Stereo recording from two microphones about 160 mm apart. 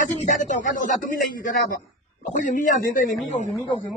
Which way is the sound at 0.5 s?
55° left (ahead or behind).